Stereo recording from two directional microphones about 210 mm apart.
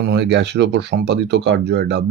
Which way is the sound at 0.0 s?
55° right (ahead or behind).